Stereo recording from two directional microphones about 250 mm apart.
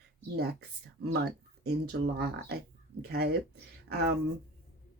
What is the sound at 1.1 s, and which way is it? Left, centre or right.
Speech, right.